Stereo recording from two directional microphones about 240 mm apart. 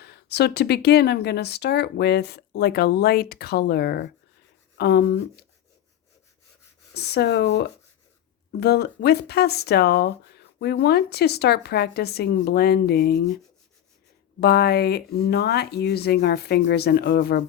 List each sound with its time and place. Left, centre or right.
0.0 s speech: left
6.9 s speech: left
14.4 s speech: left